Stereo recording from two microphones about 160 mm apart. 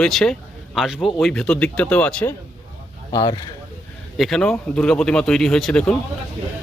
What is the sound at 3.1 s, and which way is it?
Speech, 25° left (ahead or behind).